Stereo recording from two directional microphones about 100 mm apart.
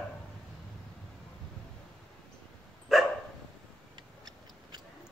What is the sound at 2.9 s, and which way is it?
Dog, centre (ahead or behind).